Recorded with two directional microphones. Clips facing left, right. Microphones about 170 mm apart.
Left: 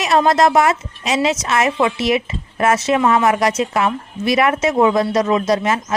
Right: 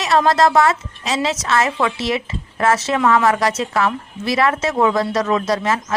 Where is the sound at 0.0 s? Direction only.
20° left (ahead or behind).